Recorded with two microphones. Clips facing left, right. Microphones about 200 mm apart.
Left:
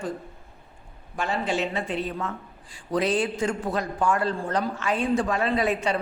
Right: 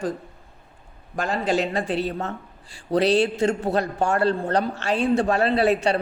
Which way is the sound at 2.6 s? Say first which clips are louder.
Right 5 dB; 70° right (ahead or behind).